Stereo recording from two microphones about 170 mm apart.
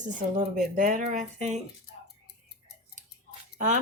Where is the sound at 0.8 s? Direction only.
50° right (ahead or behind).